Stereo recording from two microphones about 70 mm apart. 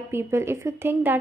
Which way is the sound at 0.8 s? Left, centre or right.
Right.